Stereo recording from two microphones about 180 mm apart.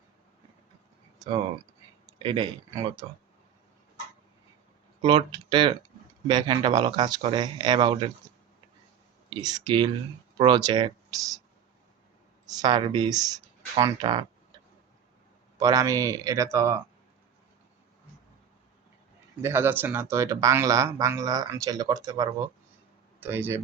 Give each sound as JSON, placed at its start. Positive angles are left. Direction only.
{"t": 1.2, "sound": "speech", "side_deg": -25}
{"t": 5.0, "sound": "speech", "side_deg": -25}
{"t": 9.3, "sound": "speech", "side_deg": -20}
{"t": 12.5, "sound": "speech", "side_deg": -20}
{"t": 15.5, "sound": "a man's voice", "side_deg": -20}
{"t": 19.4, "sound": "a man's voice", "side_deg": -15}